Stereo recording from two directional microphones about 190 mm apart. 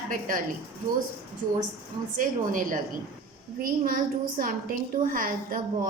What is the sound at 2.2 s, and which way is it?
A woman's voice, 45° right (ahead or behind).